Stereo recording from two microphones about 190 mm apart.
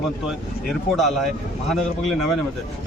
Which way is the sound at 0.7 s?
Centre (ahead or behind).